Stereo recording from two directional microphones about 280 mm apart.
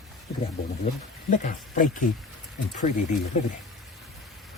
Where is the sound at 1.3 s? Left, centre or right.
Left.